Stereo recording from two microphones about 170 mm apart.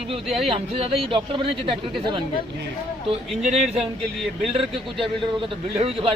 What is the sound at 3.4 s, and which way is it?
Speech, 40° right (ahead or behind).